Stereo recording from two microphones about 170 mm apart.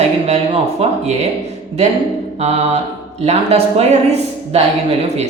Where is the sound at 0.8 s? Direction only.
35° right (ahead or behind).